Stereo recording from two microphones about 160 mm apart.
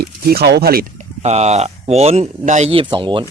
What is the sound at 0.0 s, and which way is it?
Speech, 75° right (ahead or behind).